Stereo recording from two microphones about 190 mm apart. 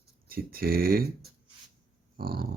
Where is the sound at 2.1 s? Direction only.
50° right (ahead or behind).